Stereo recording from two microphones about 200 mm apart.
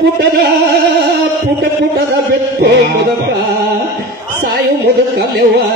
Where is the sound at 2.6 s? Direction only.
50° right (ahead or behind).